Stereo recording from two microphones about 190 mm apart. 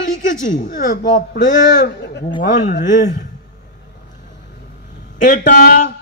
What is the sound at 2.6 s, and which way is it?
Speech, 45° left (ahead or behind).